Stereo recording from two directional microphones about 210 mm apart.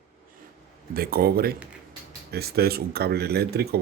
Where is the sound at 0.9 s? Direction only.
45° right (ahead or behind).